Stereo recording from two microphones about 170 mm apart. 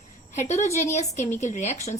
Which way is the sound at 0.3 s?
40° left (ahead or behind).